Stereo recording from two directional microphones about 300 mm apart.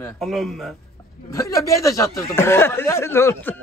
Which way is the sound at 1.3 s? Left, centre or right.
Centre.